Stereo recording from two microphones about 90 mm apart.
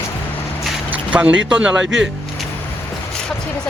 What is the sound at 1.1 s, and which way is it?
Speech, 15° right (ahead or behind).